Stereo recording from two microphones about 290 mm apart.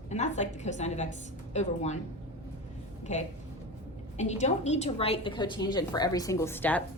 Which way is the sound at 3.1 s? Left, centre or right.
Left.